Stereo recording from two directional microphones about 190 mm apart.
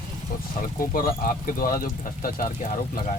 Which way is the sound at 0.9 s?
50° left (ahead or behind).